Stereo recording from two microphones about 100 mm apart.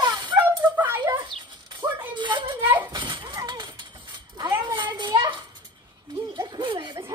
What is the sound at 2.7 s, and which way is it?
Children playing, 50° right (ahead or behind).